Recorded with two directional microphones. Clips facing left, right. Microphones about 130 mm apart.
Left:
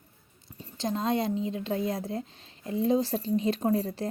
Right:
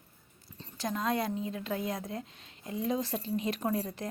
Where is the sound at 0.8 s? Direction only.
25° left (ahead or behind).